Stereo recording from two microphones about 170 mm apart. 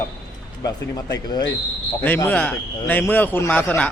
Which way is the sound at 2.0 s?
15° left (ahead or behind).